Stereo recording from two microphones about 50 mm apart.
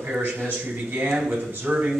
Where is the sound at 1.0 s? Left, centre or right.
Centre.